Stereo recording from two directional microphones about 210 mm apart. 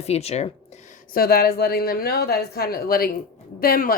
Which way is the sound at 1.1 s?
45° left (ahead or behind).